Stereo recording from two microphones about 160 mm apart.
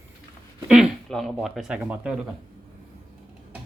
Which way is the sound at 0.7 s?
5° right (ahead or behind).